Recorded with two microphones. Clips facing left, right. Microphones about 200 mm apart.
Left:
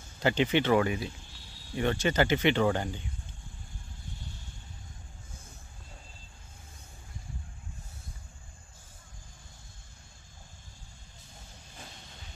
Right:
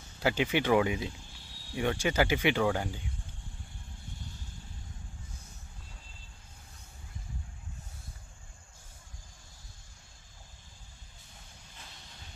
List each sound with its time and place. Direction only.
0.2 s speech: 5° right (ahead or behind)